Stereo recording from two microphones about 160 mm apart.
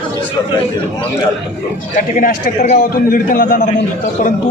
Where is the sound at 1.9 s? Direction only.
55° left (ahead or behind).